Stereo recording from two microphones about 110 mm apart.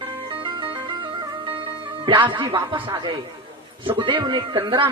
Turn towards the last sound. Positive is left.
turn(degrees=-50)  # may be behind; listen again after turning